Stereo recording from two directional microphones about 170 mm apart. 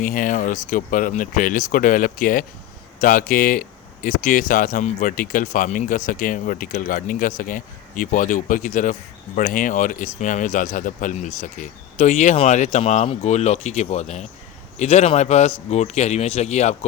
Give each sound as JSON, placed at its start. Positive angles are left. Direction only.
{"t": 0.0, "sound": "speech", "side_deg": 50}